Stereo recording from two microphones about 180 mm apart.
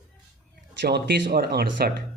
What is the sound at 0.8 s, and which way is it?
Speech, 65° right (ahead or behind).